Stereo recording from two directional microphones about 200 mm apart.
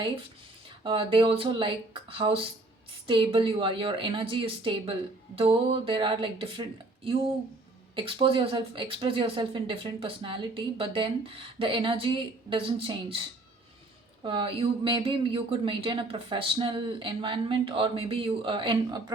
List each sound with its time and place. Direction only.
0.9 s a woman's voice: 25° right (ahead or behind)